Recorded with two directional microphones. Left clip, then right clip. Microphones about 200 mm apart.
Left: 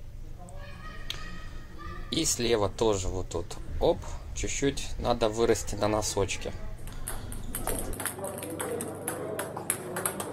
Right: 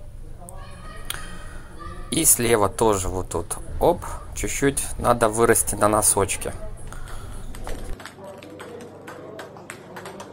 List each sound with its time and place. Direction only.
2.0 s speech: 15° right (ahead or behind)